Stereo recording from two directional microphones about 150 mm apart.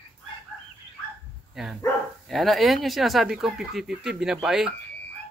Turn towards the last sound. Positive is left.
turn(degrees=-5)  # may be behind; listen again after turning